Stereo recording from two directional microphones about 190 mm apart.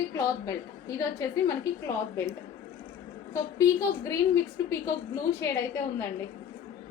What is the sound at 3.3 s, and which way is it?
A woman's voice, 15° left (ahead or behind).